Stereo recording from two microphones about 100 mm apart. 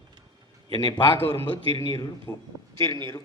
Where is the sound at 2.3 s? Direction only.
35° left (ahead or behind).